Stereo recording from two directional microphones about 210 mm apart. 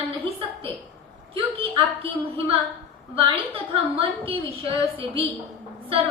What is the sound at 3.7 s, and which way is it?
A woman's voice, 25° right (ahead or behind).